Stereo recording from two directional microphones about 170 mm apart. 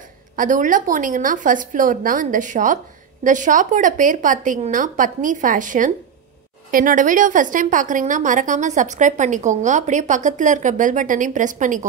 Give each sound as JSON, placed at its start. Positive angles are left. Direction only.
{"t": 0.4, "sound": "a woman's voice", "side_deg": -50}